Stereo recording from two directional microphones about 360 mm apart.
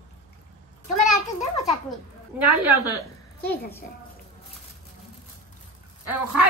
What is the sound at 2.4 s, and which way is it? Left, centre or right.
Speech, centre.